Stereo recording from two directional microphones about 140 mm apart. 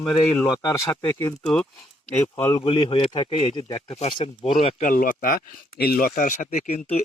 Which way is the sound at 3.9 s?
50° left (ahead or behind).